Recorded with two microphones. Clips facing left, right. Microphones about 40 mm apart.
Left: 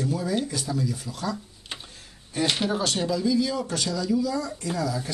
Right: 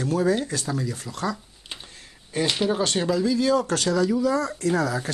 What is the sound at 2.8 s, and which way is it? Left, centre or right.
Speech, right.